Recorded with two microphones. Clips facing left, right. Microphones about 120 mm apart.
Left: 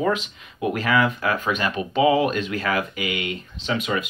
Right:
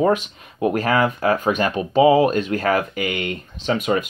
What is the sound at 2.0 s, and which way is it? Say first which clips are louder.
Speech: right 5 dB; 35° right (ahead or behind).